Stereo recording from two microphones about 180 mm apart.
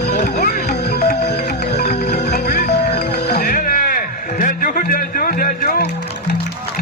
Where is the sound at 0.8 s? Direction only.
65° left (ahead or behind).